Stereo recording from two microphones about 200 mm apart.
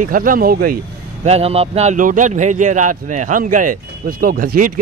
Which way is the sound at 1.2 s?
30° right (ahead or behind).